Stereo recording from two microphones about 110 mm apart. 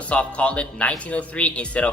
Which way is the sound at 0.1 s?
10° left (ahead or behind).